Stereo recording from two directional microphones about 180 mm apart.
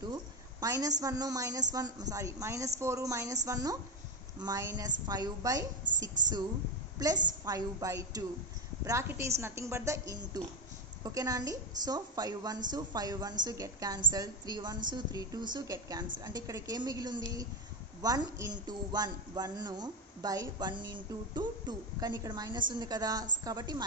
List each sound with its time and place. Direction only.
0.6 s a woman's voice: 20° right (ahead or behind)
5.9 s a sound: 45° right (ahead or behind)
7.0 s a woman's voice: 20° right (ahead or behind)